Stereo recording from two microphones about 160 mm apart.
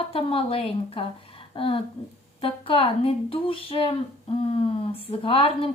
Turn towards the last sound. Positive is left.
turn(degrees=35)  # may be behind; listen again after turning